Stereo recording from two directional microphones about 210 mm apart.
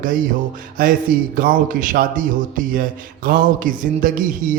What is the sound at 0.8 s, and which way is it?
Speech, 45° right (ahead or behind).